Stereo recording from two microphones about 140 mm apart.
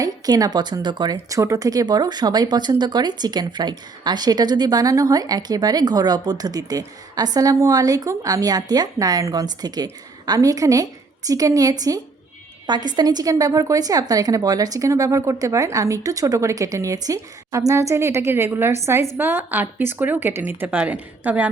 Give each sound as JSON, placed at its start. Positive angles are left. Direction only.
{"t": 0.0, "sound": "speech", "side_deg": -25}